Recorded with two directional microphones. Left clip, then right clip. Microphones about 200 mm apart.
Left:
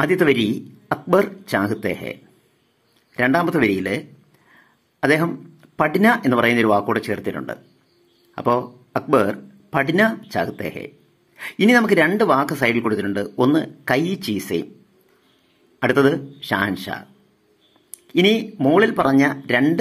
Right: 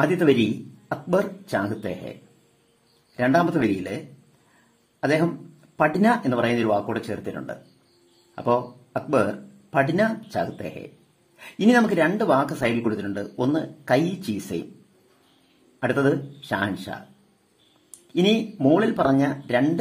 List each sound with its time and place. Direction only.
0.0 s speech: 15° left (ahead or behind)
3.2 s speech: 15° left (ahead or behind)
5.0 s speech: 15° left (ahead or behind)
15.8 s speech: 10° left (ahead or behind)
18.6 s speech: 15° left (ahead or behind)